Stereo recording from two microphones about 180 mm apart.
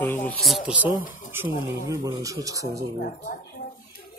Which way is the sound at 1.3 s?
15° right (ahead or behind).